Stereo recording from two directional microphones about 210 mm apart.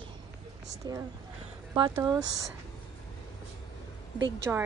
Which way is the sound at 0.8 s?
20° right (ahead or behind).